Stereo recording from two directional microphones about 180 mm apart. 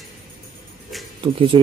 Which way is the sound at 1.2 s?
30° right (ahead or behind).